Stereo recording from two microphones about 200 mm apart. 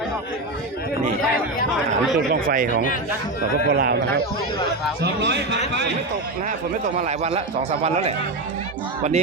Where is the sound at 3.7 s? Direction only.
55° right (ahead or behind).